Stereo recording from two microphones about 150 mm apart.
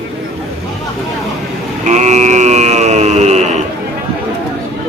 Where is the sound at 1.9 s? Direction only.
50° right (ahead or behind).